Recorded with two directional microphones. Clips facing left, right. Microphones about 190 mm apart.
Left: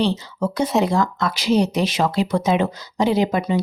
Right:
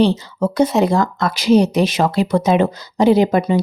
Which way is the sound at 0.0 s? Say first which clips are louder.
Right 5 dB; 45° right (ahead or behind).